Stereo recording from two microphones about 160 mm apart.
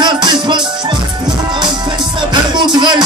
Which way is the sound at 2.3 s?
30° right (ahead or behind).